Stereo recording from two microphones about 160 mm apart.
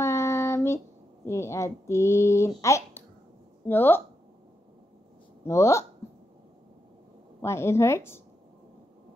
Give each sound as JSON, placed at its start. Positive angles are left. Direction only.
{"t": 0.0, "sound": "child singing", "side_deg": 20}
{"t": 1.2, "sound": "speech", "side_deg": 15}
{"t": 5.4, "sound": "speech", "side_deg": 15}
{"t": 7.4, "sound": "speech", "side_deg": 15}